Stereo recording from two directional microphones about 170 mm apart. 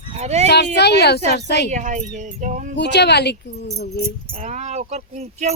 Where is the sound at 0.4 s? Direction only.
80° left.